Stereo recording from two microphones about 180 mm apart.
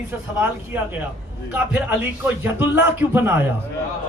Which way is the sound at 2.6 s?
10° right (ahead or behind).